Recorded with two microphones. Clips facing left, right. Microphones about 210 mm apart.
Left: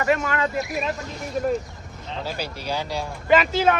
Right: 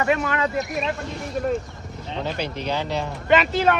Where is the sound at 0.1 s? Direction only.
Centre (ahead or behind).